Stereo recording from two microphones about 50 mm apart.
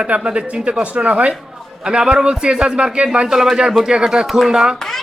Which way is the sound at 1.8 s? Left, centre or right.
Centre.